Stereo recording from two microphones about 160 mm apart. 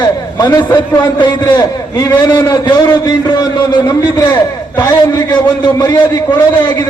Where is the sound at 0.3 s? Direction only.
20° left (ahead or behind).